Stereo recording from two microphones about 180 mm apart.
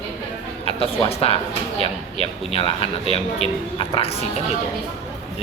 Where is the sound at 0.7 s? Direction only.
35° left (ahead or behind).